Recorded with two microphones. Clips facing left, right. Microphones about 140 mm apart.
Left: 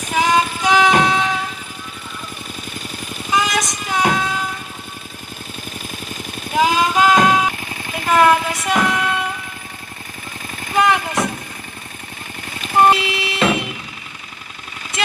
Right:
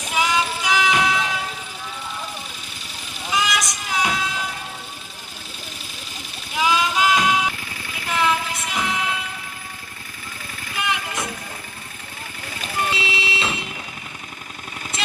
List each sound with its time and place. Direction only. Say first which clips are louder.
0.1 s music: left 5 dB; 45° left (ahead or behind)
3.3 s vehicle: left 4 dB; 50° left (ahead or behind)
6.5 s vehicle: left 5 dB; 45° left (ahead or behind)
10.8 s vehicle: left 10 dB; 75° left (ahead or behind)
12.7 s vehicle: left 11 dB; 55° left (ahead or behind)